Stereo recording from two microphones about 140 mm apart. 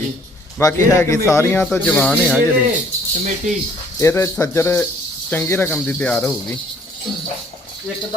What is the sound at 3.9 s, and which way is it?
A man's voice, 20° left (ahead or behind).